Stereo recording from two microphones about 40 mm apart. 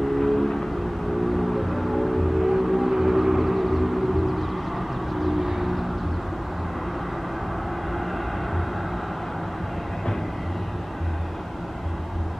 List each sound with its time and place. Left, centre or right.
0.2 s vehicle: centre
1.5 s music: centre